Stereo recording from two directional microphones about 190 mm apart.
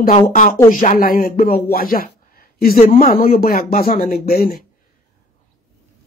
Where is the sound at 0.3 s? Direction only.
45° left (ahead or behind).